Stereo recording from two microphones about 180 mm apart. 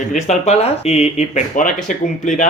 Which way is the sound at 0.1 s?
40° left (ahead or behind).